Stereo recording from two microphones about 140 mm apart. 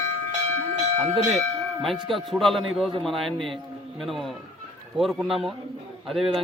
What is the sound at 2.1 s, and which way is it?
A man's voice, centre (ahead or behind).